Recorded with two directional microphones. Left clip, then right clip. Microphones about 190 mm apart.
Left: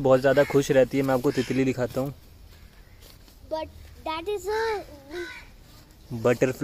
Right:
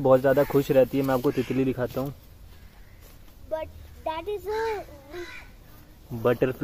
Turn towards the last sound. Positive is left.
turn(degrees=15)  # may be behind; listen again after turning